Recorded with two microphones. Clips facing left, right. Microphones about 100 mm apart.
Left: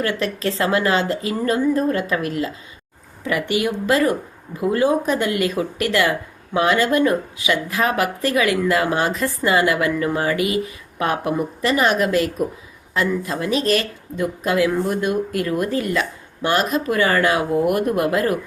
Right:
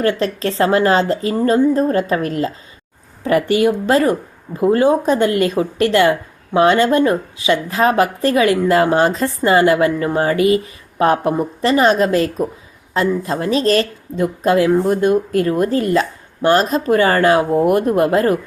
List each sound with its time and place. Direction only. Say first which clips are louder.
0.0 s speech: right 5 dB; 30° right (ahead or behind)